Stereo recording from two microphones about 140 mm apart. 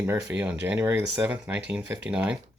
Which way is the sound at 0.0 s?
10° right (ahead or behind).